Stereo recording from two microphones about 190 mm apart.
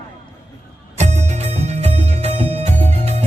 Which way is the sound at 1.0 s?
35° right (ahead or behind).